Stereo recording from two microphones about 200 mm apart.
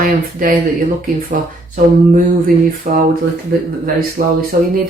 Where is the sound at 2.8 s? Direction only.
35° right (ahead or behind).